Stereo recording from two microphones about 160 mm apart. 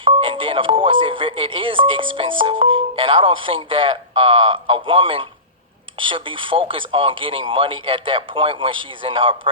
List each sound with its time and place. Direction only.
0.0 s speech: 35° right (ahead or behind)